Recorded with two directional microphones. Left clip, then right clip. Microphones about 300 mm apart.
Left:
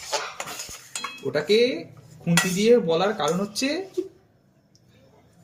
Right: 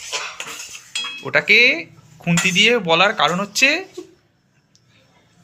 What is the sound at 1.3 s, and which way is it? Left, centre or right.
Speech, centre.